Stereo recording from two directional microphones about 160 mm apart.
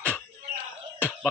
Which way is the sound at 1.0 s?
10° left (ahead or behind).